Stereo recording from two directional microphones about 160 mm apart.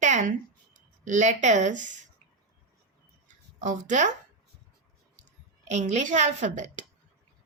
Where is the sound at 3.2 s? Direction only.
50° right (ahead or behind).